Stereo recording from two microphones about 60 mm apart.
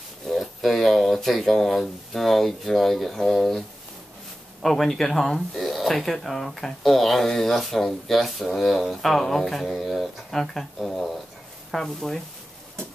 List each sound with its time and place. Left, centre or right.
0.3 s speech: centre
4.6 s speech: centre